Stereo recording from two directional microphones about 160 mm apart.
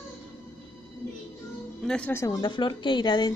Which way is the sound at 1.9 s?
10° left (ahead or behind).